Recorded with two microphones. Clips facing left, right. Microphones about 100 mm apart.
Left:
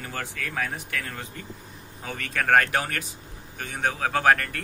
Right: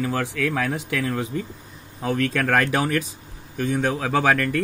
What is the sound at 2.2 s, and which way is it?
Speech, 90° right.